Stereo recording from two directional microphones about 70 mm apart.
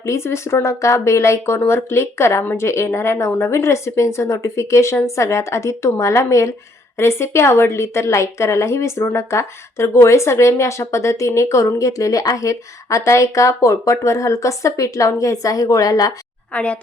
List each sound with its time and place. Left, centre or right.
0.0 s a woman's voice: left
16.5 s a woman's voice: centre